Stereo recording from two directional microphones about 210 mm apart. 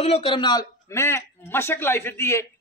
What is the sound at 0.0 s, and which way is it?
A man's voice, 30° left (ahead or behind).